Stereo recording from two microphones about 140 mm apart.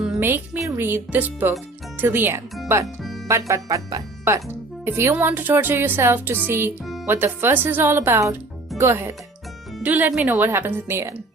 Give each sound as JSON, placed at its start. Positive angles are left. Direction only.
{"t": 0.2, "sound": "speech", "side_deg": -15}
{"t": 2.8, "sound": "speech", "side_deg": 0}
{"t": 3.2, "sound": "speech", "side_deg": -20}